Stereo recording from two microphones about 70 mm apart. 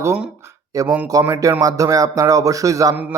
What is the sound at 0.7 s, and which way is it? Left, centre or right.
A man's voice, right.